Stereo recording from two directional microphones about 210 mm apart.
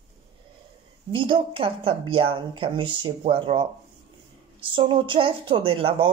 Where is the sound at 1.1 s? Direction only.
25° right (ahead or behind).